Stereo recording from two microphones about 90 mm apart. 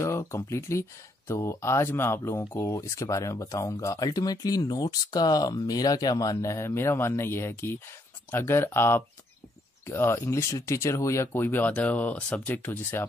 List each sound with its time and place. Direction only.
0.0 s speech: 30° left (ahead or behind)